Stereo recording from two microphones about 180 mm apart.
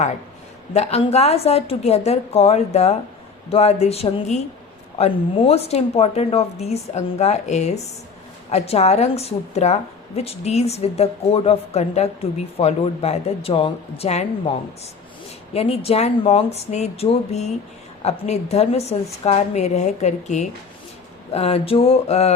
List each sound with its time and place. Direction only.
0.7 s a woman's voice: 35° left (ahead or behind)
15.5 s a woman's voice: 35° left (ahead or behind)